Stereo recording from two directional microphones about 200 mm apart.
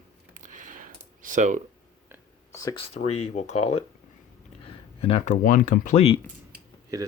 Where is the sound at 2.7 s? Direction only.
30° left (ahead or behind).